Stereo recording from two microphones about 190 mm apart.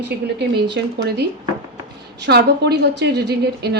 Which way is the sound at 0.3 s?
60° right (ahead or behind).